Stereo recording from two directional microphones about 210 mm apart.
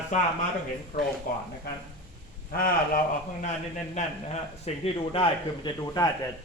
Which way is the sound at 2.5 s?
45° left (ahead or behind).